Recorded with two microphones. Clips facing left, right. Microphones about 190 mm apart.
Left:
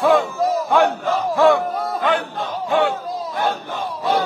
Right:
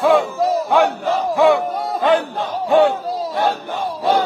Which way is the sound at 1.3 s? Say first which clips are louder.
Right 1 dB; 15° right (ahead or behind).